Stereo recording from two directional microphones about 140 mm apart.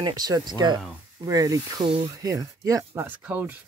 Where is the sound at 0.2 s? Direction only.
30° right (ahead or behind).